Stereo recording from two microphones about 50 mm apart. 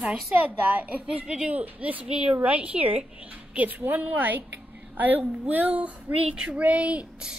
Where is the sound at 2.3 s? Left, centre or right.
Right.